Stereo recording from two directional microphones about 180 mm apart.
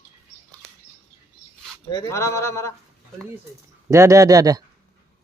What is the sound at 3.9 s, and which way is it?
Speech, 15° right (ahead or behind).